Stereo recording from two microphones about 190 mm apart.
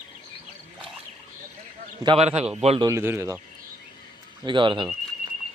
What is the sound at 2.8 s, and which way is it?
Speech, 15° right (ahead or behind).